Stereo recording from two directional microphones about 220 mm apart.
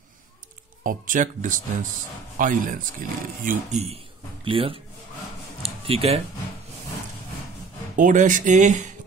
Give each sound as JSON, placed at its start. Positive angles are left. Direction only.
{"t": 0.8, "sound": "a man's voice", "side_deg": -35}
{"t": 5.6, "sound": "a sound", "side_deg": -25}
{"t": 7.9, "sound": "speech", "side_deg": -35}